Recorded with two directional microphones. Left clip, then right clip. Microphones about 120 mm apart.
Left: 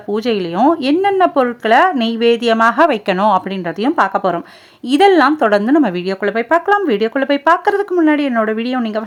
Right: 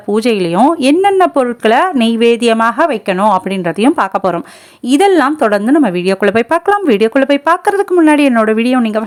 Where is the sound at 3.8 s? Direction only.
35° right (ahead or behind).